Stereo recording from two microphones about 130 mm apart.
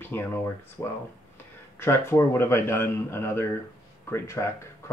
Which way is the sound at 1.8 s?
20° left (ahead or behind).